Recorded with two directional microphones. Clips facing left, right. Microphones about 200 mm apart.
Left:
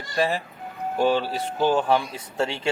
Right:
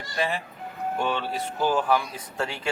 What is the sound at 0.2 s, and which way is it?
Speech, 40° left (ahead or behind).